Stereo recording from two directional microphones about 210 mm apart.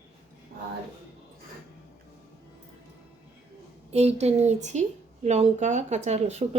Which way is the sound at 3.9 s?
30° right (ahead or behind).